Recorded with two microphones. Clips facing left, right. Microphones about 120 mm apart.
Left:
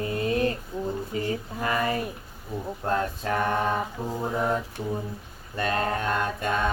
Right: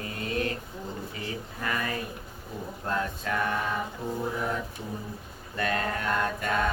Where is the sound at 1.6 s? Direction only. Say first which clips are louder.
Left 5 dB; 25° left (ahead or behind).